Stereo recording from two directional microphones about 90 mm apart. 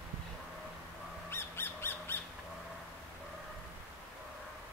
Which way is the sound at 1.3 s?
25° left (ahead or behind).